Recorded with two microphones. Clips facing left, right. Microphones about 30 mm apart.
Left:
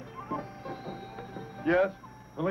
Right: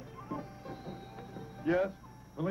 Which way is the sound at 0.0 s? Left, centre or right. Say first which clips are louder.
Left 5 dB; left.